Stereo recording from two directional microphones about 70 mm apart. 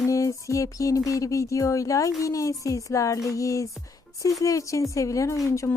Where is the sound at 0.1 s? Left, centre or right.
Left.